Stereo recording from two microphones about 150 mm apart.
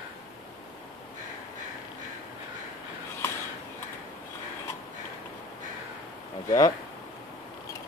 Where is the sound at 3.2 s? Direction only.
15° left (ahead or behind).